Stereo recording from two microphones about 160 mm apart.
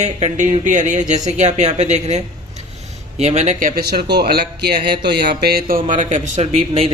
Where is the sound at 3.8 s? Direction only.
75° right (ahead or behind).